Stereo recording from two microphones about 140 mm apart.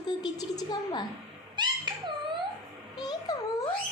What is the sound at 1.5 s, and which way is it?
Dog, 35° right (ahead or behind).